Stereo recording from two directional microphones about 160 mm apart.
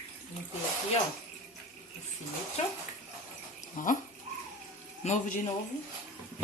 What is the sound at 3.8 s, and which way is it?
Speech, 55° left (ahead or behind).